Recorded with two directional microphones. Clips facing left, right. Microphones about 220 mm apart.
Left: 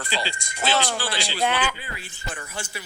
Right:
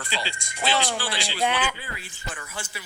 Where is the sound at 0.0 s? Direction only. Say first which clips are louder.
Left 3 dB; 35° left (ahead or behind).